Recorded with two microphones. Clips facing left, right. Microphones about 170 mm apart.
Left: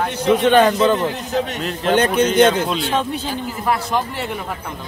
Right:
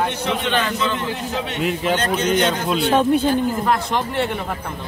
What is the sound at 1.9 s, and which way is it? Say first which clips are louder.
Speech: left 8 dB; 60° left (ahead or behind).